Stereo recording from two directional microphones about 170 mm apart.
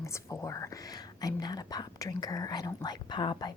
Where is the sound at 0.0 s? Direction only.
15° left (ahead or behind).